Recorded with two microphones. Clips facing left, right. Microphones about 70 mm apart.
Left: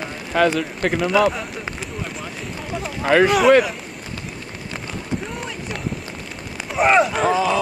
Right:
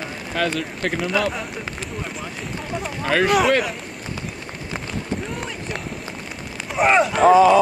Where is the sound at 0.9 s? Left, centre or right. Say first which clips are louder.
Left 5 dB; centre.